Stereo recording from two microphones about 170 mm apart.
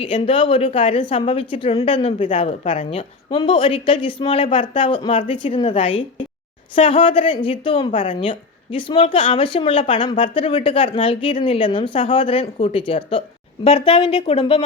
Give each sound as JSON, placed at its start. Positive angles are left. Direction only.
{"t": 0.0, "sound": "a woman's voice", "side_deg": 30}